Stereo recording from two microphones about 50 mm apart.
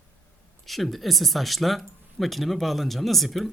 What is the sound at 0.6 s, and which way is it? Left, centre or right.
Speech, centre.